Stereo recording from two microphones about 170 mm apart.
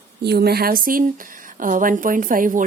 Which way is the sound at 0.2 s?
70° right (ahead or behind).